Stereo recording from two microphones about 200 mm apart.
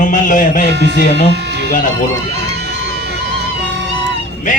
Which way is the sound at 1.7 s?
40° left (ahead or behind).